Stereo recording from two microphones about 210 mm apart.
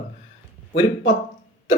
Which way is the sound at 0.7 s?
20° left (ahead or behind).